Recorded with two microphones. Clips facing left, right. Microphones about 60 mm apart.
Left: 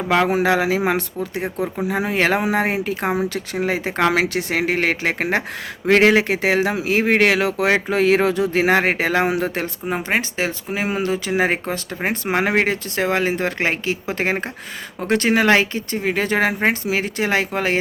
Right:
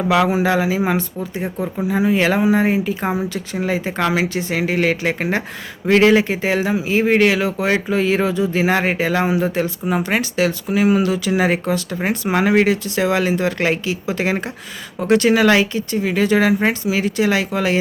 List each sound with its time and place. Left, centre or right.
0.2 s speech: left
9.8 s speech: left